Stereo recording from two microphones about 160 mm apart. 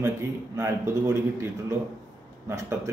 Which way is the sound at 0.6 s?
15° right (ahead or behind).